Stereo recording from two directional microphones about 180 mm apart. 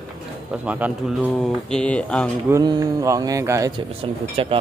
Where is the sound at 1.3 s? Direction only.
5° left (ahead or behind).